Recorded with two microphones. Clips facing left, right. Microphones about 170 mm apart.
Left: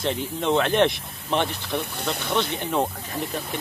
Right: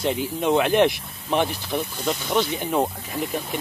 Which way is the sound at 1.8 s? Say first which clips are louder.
Right 3 dB; 65° left (ahead or behind).